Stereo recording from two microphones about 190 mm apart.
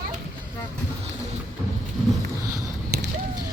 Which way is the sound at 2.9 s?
60° right (ahead or behind).